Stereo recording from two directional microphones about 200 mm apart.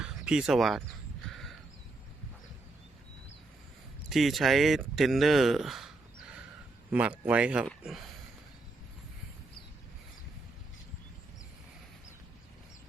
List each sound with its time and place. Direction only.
0.0 s speech: 5° right (ahead or behind)
1.2 s crow: centre (ahead or behind)
4.1 s speech: centre (ahead or behind)